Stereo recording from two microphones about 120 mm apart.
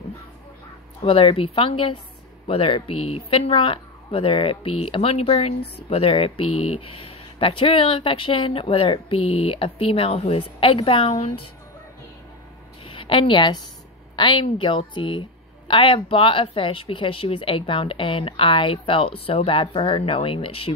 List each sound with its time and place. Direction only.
1.0 s speech: 50° left (ahead or behind)
12.8 s a woman's voice: 45° left (ahead or behind)